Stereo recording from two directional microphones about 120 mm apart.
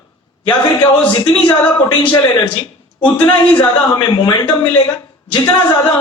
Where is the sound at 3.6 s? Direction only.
35° left (ahead or behind).